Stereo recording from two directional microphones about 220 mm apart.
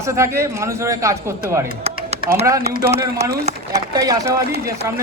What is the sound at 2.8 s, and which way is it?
A man's voice, 10° right (ahead or behind).